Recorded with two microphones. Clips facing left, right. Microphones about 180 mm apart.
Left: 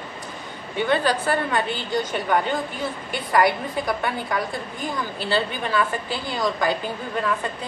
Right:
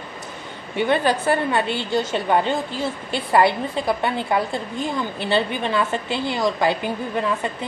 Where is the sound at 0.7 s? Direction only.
15° right (ahead or behind).